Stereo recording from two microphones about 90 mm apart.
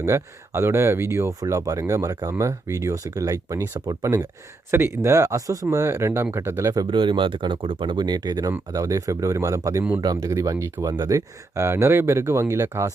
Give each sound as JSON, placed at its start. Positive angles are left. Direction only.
{"t": 0.0, "sound": "speech", "side_deg": -30}
{"t": 6.9, "sound": "speech", "side_deg": -65}
{"t": 10.9, "sound": "speech", "side_deg": -50}
{"t": 11.5, "sound": "speech", "side_deg": -30}